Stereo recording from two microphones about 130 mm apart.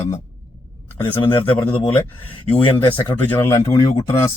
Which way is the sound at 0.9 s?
40° left (ahead or behind).